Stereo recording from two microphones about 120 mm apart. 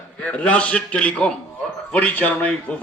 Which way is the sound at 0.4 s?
10° left (ahead or behind).